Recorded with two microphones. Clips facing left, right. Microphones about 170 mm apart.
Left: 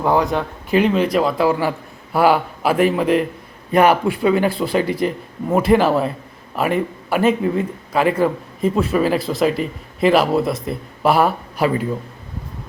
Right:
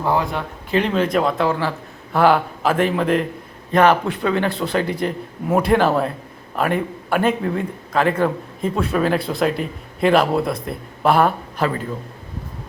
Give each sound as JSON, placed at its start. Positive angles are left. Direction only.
{"t": 0.0, "sound": "a man's voice", "side_deg": 15}
{"t": 1.1, "sound": "a man's voice", "side_deg": 0}